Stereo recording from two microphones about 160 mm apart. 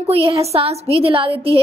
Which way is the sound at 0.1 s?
40° right (ahead or behind).